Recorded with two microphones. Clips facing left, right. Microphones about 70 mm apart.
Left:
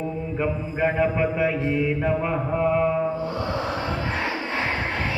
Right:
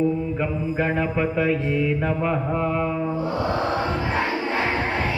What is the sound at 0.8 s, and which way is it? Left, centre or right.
Mantra, centre.